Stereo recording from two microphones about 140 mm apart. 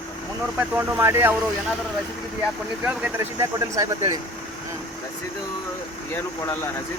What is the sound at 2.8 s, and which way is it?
Speech, 10° right (ahead or behind).